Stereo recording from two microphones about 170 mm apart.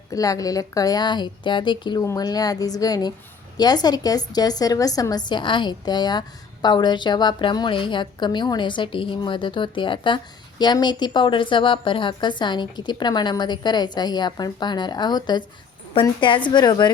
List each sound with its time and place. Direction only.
0.1 s a woman's voice: 20° left (ahead or behind)